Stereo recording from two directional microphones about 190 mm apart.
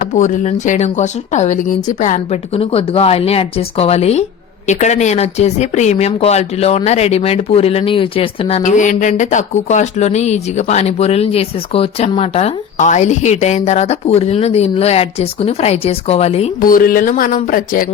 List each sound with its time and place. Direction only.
0.7 s speech: 40° left (ahead or behind)
2.6 s speech: 30° left (ahead or behind)
16.6 s speech: 50° left (ahead or behind)